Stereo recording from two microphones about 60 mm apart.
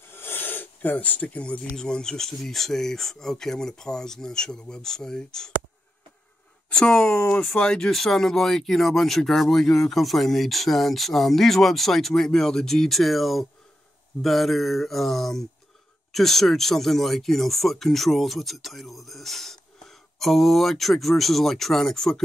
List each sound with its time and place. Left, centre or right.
0.1 s a sound: left
1.8 s speech: centre
6.7 s speech: centre
7.9 s speech: centre